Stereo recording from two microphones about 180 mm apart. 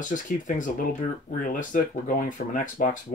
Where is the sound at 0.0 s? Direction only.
45° left (ahead or behind).